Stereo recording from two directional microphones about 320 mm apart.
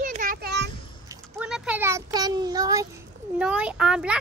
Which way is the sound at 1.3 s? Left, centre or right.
Centre.